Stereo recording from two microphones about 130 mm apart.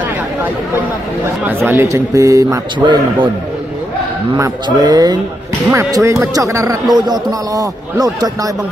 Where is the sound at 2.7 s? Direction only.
35° right (ahead or behind).